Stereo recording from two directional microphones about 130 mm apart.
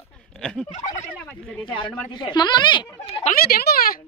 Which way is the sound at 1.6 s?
40° left (ahead or behind).